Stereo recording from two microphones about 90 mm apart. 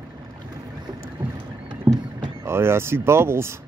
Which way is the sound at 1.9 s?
50° right (ahead or behind).